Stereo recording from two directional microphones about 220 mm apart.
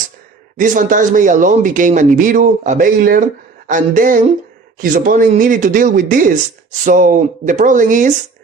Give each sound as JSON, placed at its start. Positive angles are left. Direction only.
{"t": 0.5, "sound": "speech", "side_deg": -35}